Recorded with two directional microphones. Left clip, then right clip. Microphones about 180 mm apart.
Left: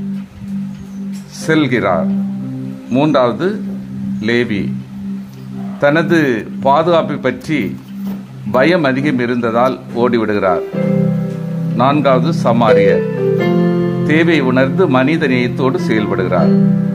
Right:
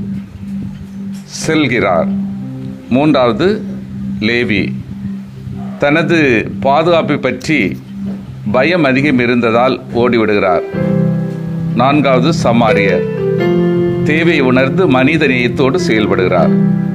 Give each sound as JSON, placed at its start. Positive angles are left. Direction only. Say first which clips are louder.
{"t": 1.4, "sound": "a man's voice", "louder": "right 1 dB", "side_deg": -20}
{"t": 5.8, "sound": "a man's voice", "louder": "right 1 dB", "side_deg": -20}
{"t": 11.7, "sound": "a man's voice", "louder": "right 1 dB", "side_deg": -20}
{"t": 13.1, "sound": "keyboard", "louder": "right 1 dB", "side_deg": 5}
{"t": 14.0, "sound": "speech", "louder": "even", "side_deg": -20}